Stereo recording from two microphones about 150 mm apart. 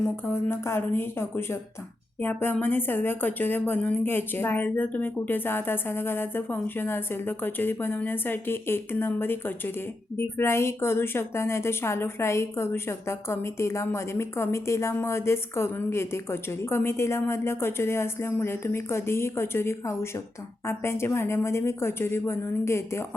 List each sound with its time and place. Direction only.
0.3 s a woman's voice: 15° left (ahead or behind)